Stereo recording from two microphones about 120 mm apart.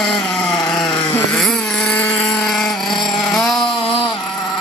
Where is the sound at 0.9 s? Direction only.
55° left (ahead or behind).